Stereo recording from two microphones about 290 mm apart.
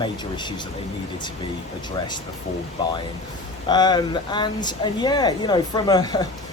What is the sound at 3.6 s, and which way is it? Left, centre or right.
Speech, centre.